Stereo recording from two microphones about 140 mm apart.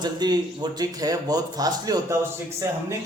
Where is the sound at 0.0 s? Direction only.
30° right (ahead or behind).